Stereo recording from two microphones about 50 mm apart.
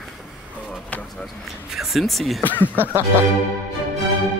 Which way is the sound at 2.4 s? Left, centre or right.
Left.